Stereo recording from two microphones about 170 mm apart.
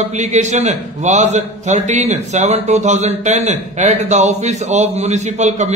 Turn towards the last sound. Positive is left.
turn(degrees=-40)  # may be behind; listen again after turning